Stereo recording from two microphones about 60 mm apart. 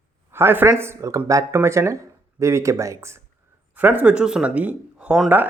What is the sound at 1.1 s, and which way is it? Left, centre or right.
Speech, right.